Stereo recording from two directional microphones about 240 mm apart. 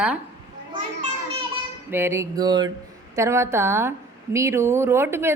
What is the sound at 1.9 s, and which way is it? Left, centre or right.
A woman's voice, centre.